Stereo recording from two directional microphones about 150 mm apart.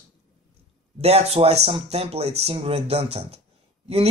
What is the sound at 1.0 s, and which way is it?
Speech, 45° right (ahead or behind).